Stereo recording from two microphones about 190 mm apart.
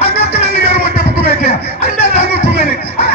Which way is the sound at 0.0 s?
60° right (ahead or behind).